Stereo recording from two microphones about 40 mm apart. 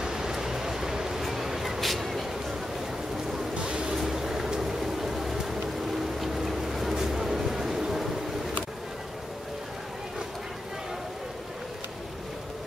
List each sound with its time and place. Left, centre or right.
0.0 s a sound: centre
3.5 s music: right
3.9 s vehicle: centre